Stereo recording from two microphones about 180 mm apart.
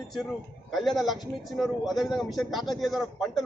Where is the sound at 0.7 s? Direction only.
Centre (ahead or behind).